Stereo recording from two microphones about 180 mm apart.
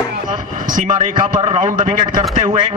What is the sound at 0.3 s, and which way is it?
A man's voice, 45° right (ahead or behind).